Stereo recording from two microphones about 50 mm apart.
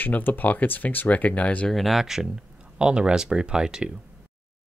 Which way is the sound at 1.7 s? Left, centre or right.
Centre.